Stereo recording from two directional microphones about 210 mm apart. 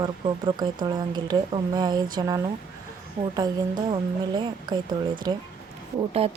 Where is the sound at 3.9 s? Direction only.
20° right (ahead or behind).